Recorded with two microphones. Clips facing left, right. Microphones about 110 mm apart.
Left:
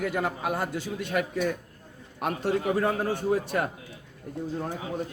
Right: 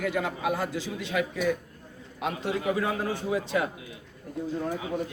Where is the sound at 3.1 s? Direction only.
50° left (ahead or behind).